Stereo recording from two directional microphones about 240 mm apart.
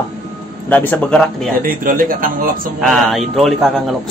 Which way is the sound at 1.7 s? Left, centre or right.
Right.